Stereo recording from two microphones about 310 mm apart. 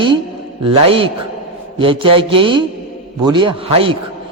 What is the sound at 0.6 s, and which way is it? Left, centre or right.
A man's voice, centre.